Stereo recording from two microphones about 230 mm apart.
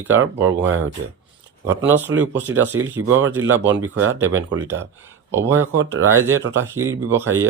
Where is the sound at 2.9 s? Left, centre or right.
Right.